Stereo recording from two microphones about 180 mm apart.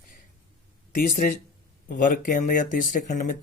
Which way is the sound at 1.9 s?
50° left (ahead or behind).